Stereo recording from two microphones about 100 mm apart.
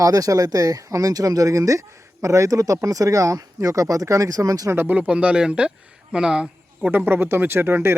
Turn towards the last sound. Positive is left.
turn(degrees=-25)  # may be behind; listen again after turning